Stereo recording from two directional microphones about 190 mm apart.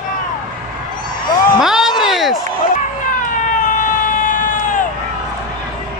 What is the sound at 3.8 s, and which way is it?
Emergency vehicle, 45° left (ahead or behind).